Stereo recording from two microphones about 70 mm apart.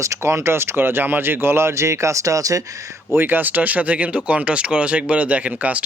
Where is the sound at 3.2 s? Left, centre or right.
Right.